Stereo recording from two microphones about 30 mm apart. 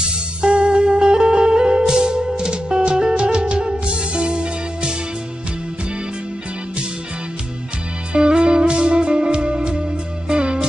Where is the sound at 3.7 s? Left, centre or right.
Right.